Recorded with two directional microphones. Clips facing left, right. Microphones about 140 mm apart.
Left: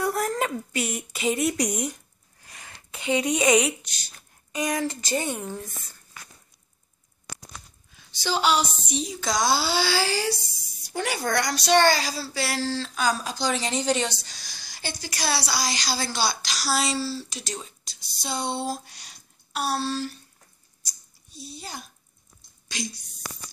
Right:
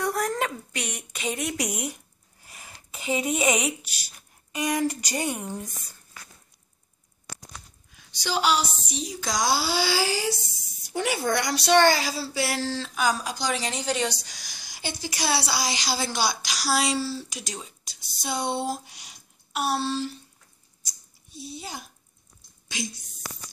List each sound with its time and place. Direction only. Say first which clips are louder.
0.0 s speech: left 1 dB; 5° left (ahead or behind); by 5.7 s 15° right (ahead or behind)
7.9 s speech: left 1 dB; 10° right (ahead or behind)
21.3 s speech: right 2 dB; 20° right (ahead or behind)